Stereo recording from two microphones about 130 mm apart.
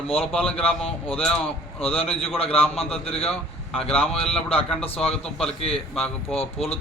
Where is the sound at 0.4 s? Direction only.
45° left (ahead or behind).